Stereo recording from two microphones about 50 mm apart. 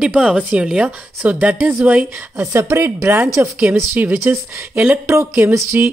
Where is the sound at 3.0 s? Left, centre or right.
Right.